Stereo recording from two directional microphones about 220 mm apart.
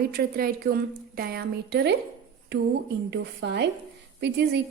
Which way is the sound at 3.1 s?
50° right (ahead or behind).